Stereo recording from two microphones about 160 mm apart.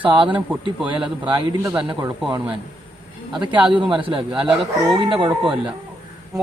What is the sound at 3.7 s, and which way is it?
Speech, 30° right (ahead or behind).